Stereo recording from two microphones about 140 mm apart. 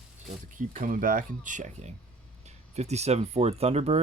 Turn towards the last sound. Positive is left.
turn(degrees=-50)  # may be behind; listen again after turning